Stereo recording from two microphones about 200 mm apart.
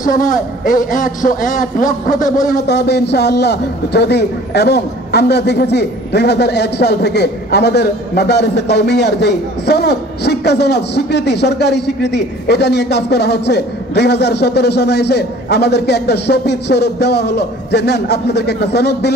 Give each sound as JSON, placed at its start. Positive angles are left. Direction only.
{"t": 0.0, "sound": "a man's voice", "side_deg": 40}
{"t": 2.4, "sound": "a man's voice", "side_deg": 55}